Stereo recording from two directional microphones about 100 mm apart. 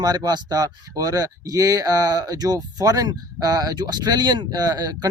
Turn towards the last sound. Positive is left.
turn(degrees=-40)  # may be behind; listen again after turning